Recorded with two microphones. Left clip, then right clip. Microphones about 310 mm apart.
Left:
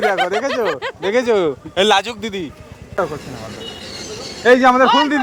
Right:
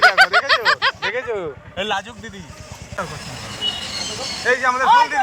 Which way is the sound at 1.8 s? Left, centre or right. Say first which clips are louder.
Left 9 dB; left.